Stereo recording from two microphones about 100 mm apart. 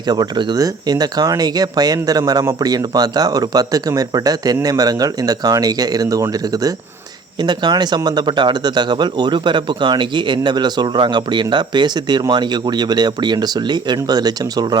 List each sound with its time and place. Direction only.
0.1 s speech: 45° right (ahead or behind)
7.4 s speech: 45° right (ahead or behind)